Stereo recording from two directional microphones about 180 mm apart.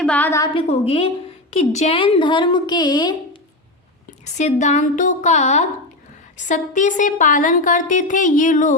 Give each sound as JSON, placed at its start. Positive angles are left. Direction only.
{"t": 0.0, "sound": "a woman's voice", "side_deg": 10}
{"t": 0.5, "sound": "a woman's voice", "side_deg": 35}
{"t": 4.4, "sound": "a woman's voice", "side_deg": 40}